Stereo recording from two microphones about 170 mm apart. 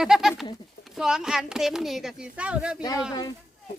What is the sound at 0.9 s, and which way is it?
Speech, 5° right (ahead or behind).